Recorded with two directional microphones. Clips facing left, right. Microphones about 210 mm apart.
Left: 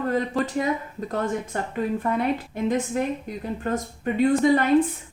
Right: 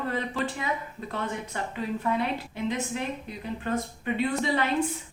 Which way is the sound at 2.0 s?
50° left (ahead or behind).